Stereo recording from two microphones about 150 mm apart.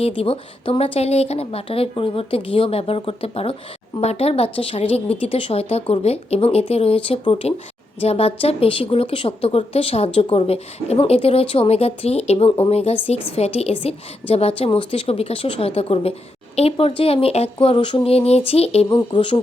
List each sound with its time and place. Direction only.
0.2 s a woman's voice: 40° left (ahead or behind)
18.9 s a woman's voice: 30° left (ahead or behind)